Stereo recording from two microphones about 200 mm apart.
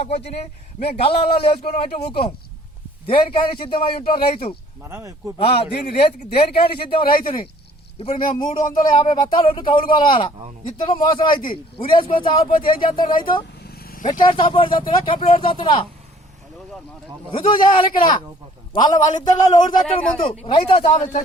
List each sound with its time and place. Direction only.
0.8 s speech: 30° left (ahead or behind)
4.8 s speech: 10° right (ahead or behind)
5.4 s speech: 25° left (ahead or behind)
6.3 s speech: 50° left (ahead or behind)
7.9 s a man's voice: 30° left (ahead or behind)
12.5 s speech: 45° left (ahead or behind)
12.8 s speech: 25° left (ahead or behind)
13.7 s vehicle: 45° left (ahead or behind)
14.2 s speech: 25° left (ahead or behind)
17.3 s a man's voice: 25° left (ahead or behind)